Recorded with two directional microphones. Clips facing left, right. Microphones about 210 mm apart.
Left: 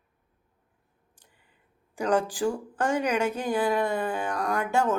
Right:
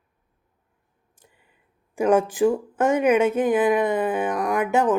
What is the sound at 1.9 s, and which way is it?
Speech, 25° right (ahead or behind).